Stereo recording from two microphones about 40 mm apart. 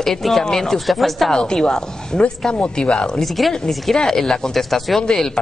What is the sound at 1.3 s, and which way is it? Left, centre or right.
Speech, centre.